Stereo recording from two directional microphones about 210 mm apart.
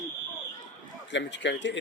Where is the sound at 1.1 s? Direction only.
60° left (ahead or behind).